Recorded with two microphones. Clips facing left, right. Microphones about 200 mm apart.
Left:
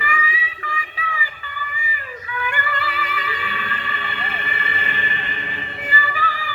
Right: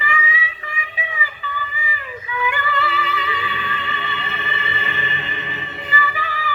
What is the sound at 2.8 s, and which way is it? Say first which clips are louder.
Music: right 3 dB; 25° right (ahead or behind).